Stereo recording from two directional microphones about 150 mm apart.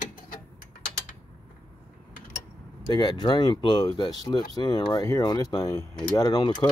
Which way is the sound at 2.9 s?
30° left (ahead or behind).